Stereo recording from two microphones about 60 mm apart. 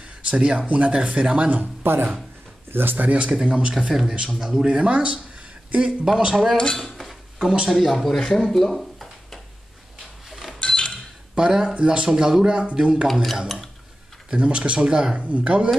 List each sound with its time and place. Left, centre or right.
0.0 s a sound: centre
0.7 s speech: right
1.6 s speech: right
3.4 s speech: centre
3.7 s a man's voice: centre
6.5 s dishes: centre
6.8 s dishes: centre
7.7 s a man's voice: centre
8.4 s a sound: centre
10.6 s a sound: centre
11.3 s speech: centre
13.0 s a man's voice: centre
14.3 s speech: centre
15.1 s speech: right